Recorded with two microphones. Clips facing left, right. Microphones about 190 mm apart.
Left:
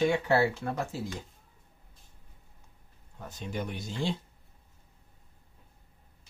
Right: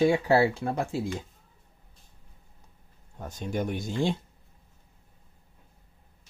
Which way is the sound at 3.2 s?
50° right (ahead or behind).